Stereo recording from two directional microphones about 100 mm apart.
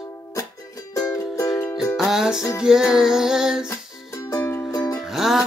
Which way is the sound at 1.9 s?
5° right (ahead or behind).